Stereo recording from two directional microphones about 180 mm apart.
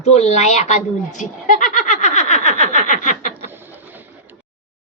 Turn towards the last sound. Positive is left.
turn(degrees=45)  # may be behind; listen again after turning